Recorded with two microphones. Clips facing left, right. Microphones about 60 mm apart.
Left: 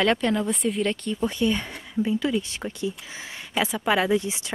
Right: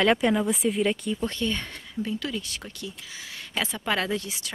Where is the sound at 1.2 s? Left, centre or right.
Centre.